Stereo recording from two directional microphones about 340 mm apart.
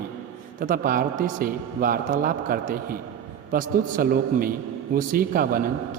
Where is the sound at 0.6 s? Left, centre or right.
Right.